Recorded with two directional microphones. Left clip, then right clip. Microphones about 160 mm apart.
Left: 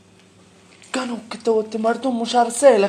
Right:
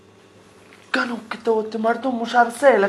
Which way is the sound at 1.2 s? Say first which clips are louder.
Left 1 dB; 30° left (ahead or behind).